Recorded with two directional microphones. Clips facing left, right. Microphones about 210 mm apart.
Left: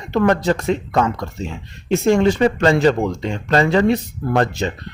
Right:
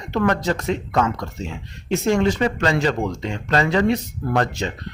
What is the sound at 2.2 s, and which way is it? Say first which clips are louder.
Speech: left 5 dB; 25° left (ahead or behind).